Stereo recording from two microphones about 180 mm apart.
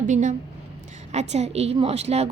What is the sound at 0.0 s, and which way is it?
A woman's voice, 45° right (ahead or behind).